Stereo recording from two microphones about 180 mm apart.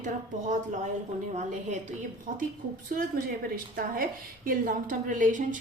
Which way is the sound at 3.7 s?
50° right (ahead or behind).